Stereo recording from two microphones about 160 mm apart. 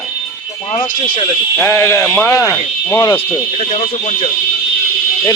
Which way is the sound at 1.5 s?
15° left (ahead or behind).